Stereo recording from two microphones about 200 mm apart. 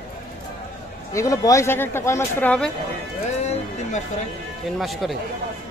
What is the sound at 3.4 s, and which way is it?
Music, 35° left (ahead or behind).